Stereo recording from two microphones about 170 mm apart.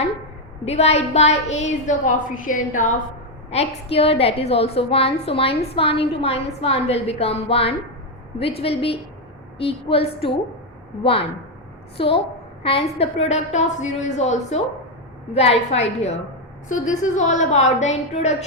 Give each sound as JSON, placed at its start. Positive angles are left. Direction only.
{"t": 0.6, "sound": "a woman's voice", "side_deg": 40}
{"t": 3.5, "sound": "a woman's voice", "side_deg": 40}
{"t": 11.9, "sound": "a woman's voice", "side_deg": 35}